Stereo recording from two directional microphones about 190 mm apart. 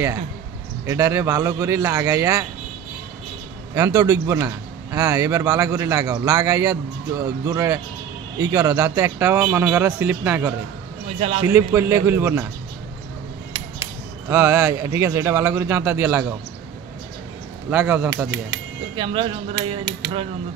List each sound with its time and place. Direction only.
0.8 s speech: 15° right (ahead or behind)
3.7 s speech: 15° right (ahead or behind)
11.1 s a man's voice: 35° right (ahead or behind)
11.4 s speech: 15° right (ahead or behind)
14.3 s speech: 15° right (ahead or behind)
17.6 s speech: 10° right (ahead or behind)
18.9 s speech: 30° right (ahead or behind)
19.5 s speech: 70° right (ahead or behind)